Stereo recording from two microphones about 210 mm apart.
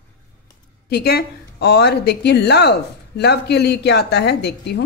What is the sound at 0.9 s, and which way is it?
A woman's voice, 50° left (ahead or behind).